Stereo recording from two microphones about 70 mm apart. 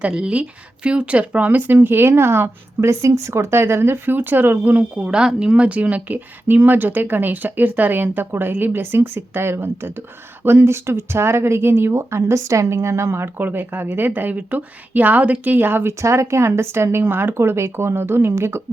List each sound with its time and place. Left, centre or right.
0.2 s speech: centre; by 18.6 s right